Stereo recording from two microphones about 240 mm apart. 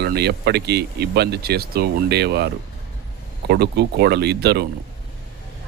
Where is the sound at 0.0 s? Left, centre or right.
Right.